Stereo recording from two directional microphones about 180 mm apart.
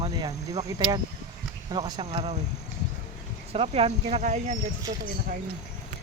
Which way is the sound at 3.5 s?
35° right (ahead or behind).